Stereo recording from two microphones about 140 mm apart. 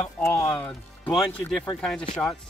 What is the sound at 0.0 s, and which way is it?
Music, 15° left (ahead or behind).